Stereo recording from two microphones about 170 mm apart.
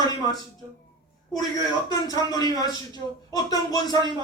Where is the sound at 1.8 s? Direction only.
20° left (ahead or behind).